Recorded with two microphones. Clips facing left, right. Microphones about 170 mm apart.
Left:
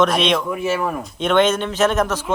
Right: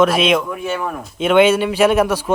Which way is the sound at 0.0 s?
5° right (ahead or behind).